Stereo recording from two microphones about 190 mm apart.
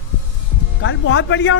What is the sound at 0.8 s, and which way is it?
Speech, 85° left.